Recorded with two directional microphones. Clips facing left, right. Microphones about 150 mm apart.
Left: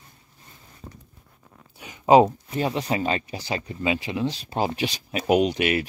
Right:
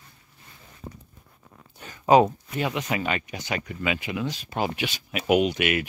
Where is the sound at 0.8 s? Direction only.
15° right (ahead or behind).